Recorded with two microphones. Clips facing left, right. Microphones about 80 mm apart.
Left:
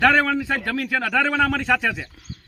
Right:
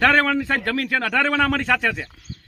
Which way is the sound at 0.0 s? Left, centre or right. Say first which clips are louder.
Even; centre.